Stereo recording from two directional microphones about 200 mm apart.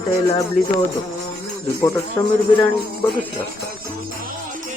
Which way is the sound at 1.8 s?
15° left (ahead or behind).